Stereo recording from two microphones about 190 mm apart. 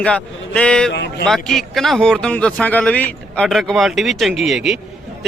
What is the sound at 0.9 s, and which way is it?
Speech, 65° left (ahead or behind).